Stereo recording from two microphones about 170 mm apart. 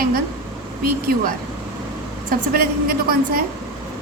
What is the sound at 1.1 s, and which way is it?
Speech, 65° right (ahead or behind).